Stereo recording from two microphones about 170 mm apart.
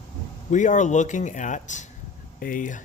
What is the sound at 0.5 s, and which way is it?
A man's voice, 45° left (ahead or behind).